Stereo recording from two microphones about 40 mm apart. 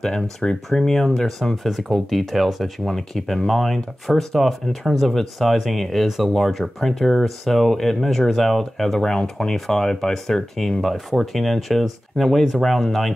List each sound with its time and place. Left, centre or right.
0.0 s speech: centre
9.0 s speech: centre
10.8 s speech: centre